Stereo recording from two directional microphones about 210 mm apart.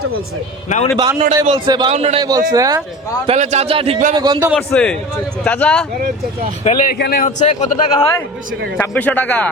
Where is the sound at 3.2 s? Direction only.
35° right (ahead or behind).